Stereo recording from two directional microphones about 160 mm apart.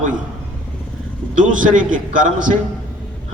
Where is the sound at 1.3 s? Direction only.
55° right (ahead or behind).